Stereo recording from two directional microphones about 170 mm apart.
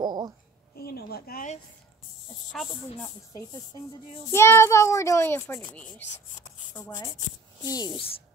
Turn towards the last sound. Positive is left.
turn(degrees=20)  # may be behind; listen again after turning